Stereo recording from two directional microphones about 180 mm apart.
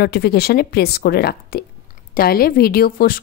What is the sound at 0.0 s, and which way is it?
A woman's voice, 60° left (ahead or behind).